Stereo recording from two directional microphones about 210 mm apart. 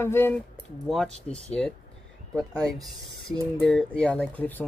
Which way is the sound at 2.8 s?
Centre (ahead or behind).